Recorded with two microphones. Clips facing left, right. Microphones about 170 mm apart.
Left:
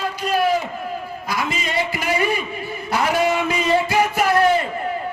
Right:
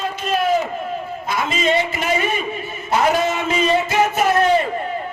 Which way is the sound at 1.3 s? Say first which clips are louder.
Right 5 dB; 25° right (ahead or behind).